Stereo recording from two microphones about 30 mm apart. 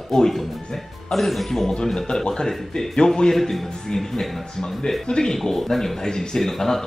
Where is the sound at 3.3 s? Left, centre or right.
Centre.